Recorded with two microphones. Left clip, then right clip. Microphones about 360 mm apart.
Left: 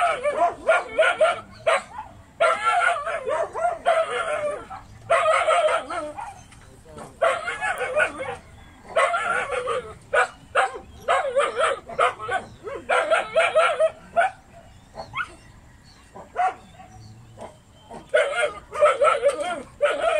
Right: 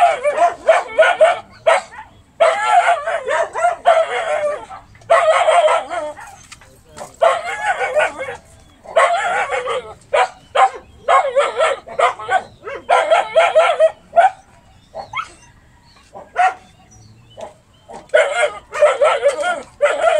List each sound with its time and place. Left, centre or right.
0.0 s dog: centre
0.3 s dog: right
0.9 s dog: centre
3.8 s chicken: centre
7.2 s bow-wow: centre
8.9 s dog: centre
18.1 s bow-wow: centre